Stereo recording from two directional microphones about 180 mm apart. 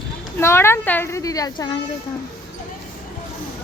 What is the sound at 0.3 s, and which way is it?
A child's voice, 15° left (ahead or behind).